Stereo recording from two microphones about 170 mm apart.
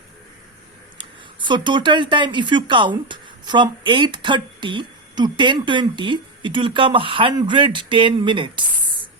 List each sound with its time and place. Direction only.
0.9 s speech: 25° right (ahead or behind)